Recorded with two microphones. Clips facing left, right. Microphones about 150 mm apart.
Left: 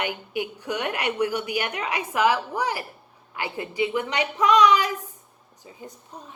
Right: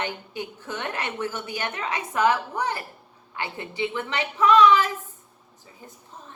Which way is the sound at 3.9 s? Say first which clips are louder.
Left 3 dB; 15° left (ahead or behind).